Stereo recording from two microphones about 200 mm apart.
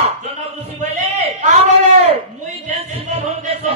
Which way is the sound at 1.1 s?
35° right (ahead or behind).